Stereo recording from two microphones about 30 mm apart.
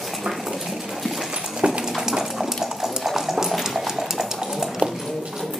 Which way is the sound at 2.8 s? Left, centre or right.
Centre.